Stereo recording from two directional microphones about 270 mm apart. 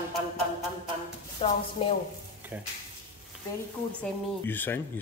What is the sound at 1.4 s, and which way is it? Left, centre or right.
Speech, left.